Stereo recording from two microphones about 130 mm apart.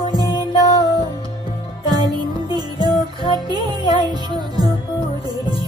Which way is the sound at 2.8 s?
40° left (ahead or behind).